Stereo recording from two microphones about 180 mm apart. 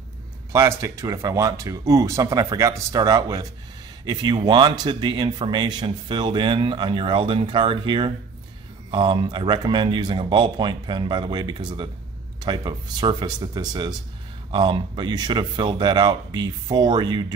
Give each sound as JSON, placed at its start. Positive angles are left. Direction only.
{"t": 0.5, "sound": "speech", "side_deg": -20}